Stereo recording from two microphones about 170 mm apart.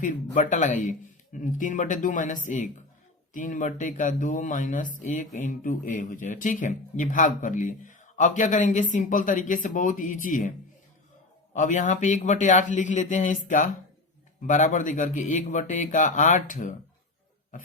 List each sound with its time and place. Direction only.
0.0 s speech: 45° left (ahead or behind)
11.5 s speech: 45° left (ahead or behind)